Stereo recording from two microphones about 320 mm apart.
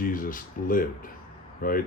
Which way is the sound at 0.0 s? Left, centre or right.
Left.